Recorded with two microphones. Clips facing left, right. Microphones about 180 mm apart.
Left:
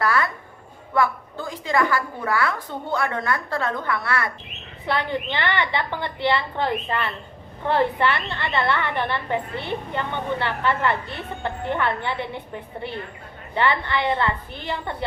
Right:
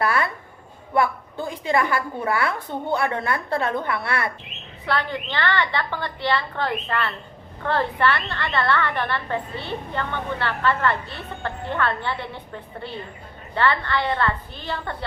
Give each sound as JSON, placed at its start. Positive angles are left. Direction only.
{"t": 0.0, "sound": "a sound", "side_deg": -25}
{"t": 0.9, "sound": "a woman's voice", "side_deg": -20}
{"t": 4.9, "sound": "a woman's voice", "side_deg": 15}